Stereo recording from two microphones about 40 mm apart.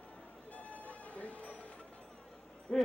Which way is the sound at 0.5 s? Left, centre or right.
Left.